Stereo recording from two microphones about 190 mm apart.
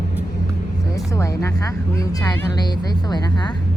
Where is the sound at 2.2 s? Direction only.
20° left (ahead or behind).